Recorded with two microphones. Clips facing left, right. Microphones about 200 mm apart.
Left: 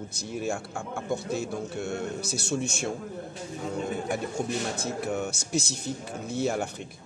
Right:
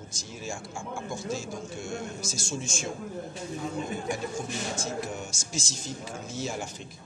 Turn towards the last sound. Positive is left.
turn(degrees=60)  # may be behind; listen again after turning